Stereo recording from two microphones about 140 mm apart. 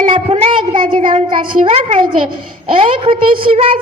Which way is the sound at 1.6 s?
45° right (ahead or behind).